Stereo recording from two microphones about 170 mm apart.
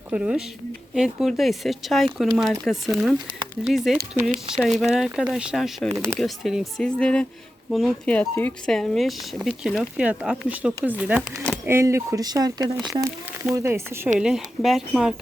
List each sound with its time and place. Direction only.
0.1 s speech: 5° right (ahead or behind)
14.2 s speech: 5° right (ahead or behind)